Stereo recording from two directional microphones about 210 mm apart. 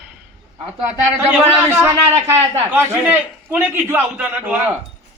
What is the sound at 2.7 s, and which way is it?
A man's voice, 10° right (ahead or behind).